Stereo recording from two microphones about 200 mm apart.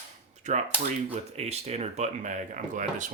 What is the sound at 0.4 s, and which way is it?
Speech, 35° right (ahead or behind).